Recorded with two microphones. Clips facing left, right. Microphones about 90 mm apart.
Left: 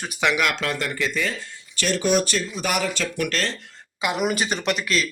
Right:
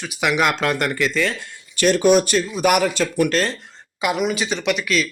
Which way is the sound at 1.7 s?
50° right (ahead or behind).